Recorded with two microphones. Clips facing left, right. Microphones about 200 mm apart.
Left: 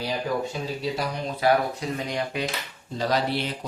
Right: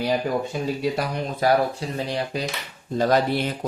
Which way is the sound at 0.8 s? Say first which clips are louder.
Right 3 dB; 55° right (ahead or behind).